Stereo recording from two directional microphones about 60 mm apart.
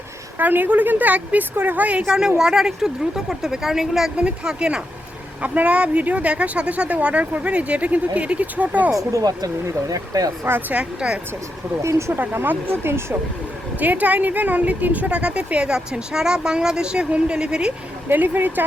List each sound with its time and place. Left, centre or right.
0.3 s speech: right
2.0 s a woman's voice: centre
9.0 s speech: right
10.7 s a woman's voice: centre
11.8 s speech: right
12.1 s speech: right
13.7 s speech: right
18.1 s speech: right